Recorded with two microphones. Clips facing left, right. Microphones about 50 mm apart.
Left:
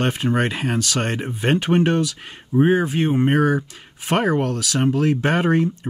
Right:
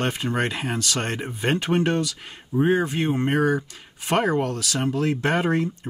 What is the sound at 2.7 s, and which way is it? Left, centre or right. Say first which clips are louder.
Speech: left 3 dB; centre.